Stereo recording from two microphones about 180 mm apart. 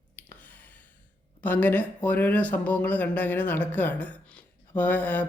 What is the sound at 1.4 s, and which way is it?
Speech, 10° left (ahead or behind).